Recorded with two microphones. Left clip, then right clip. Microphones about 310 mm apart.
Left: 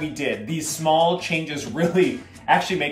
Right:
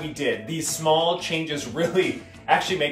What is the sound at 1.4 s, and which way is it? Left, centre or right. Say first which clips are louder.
Speech: left 1 dB; centre.